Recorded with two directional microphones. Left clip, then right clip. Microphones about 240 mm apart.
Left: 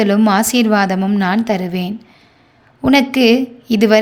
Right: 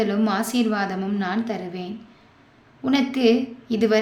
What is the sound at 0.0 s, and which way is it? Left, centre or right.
A woman's voice, left.